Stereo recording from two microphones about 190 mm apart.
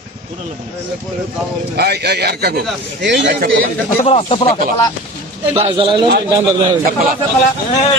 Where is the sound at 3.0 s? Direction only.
70° right (ahead or behind).